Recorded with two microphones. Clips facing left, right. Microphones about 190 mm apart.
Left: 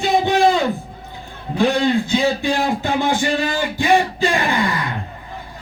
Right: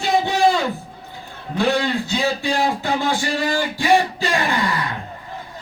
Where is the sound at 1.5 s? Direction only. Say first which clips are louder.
Left 3 dB; 15° left (ahead or behind).